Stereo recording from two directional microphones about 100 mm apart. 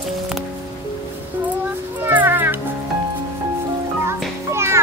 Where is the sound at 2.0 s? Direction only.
20° right (ahead or behind).